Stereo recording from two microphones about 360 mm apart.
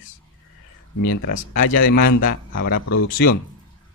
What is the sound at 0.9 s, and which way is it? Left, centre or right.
Speech, left.